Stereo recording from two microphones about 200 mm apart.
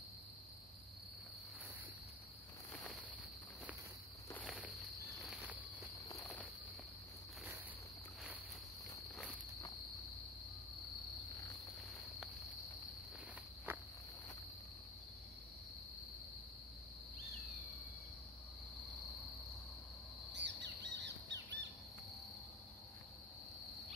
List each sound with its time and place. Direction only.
2.7 s a sound: 5° left (ahead or behind)
4.3 s insect: 10° left (ahead or behind)
5.2 s insect: 5° right (ahead or behind)
13.7 s cricket: 10° right (ahead or behind)
20.3 s squawk: 60° right (ahead or behind)